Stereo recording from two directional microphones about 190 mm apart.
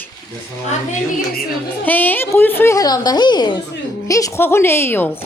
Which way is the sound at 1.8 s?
10° left (ahead or behind).